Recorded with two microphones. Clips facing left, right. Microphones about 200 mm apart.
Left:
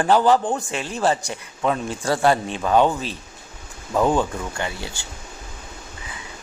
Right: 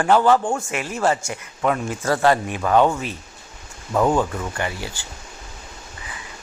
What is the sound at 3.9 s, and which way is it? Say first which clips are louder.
Speech: right 1 dB; centre (ahead or behind).